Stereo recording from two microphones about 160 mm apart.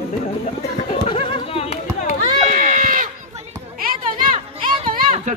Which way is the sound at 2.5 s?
55° right (ahead or behind).